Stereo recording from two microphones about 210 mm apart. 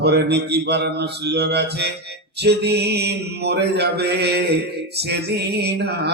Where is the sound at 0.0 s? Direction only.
50° right (ahead or behind).